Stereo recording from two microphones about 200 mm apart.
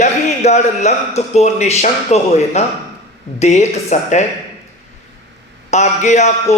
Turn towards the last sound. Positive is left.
turn(degrees=35)  # may be behind; listen again after turning